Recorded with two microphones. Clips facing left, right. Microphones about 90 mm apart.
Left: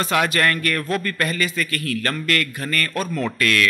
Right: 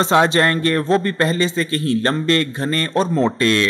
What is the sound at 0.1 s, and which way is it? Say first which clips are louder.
A man's voice: right 4 dB; 25° right (ahead or behind).